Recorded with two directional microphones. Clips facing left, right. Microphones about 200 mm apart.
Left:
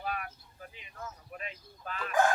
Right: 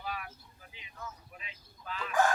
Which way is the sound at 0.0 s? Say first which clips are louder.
Left 3 dB; 55° left (ahead or behind).